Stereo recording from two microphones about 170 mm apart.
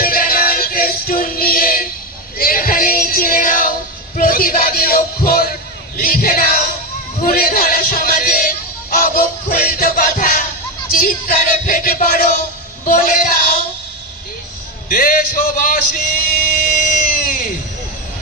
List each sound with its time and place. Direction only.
0.0 s music: 60° left (ahead or behind)
2.4 s female singing: 55° left (ahead or behind)
4.2 s music: 55° left (ahead or behind)
14.8 s music: 55° left (ahead or behind)